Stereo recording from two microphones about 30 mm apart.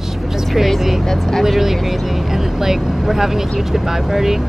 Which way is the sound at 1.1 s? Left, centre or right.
Centre.